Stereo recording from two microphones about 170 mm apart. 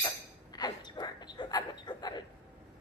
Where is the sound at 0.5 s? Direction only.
25° left (ahead or behind).